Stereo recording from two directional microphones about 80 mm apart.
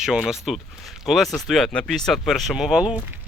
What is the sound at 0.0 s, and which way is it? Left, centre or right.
Speech, centre.